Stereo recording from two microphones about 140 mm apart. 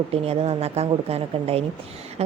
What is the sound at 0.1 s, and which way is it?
A woman's voice, 45° right (ahead or behind).